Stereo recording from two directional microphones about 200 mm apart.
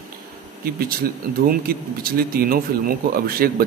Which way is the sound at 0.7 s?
50° right (ahead or behind).